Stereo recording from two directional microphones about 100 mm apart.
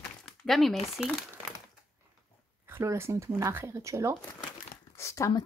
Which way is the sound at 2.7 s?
25° right (ahead or behind).